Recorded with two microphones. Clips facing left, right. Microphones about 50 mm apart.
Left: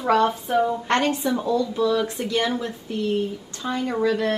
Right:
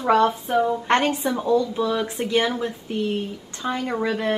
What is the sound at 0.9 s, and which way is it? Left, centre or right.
A woman's voice, right.